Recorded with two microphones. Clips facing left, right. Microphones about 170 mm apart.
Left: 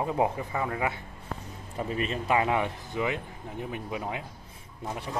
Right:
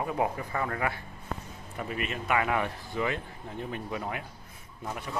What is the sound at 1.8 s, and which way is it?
Speech, 30° left (ahead or behind).